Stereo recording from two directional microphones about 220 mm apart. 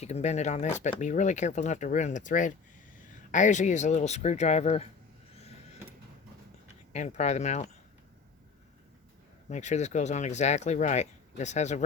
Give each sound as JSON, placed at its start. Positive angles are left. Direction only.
{"t": 0.0, "sound": "speech", "side_deg": 30}
{"t": 6.9, "sound": "speech", "side_deg": 30}
{"t": 9.5, "sound": "speech", "side_deg": 30}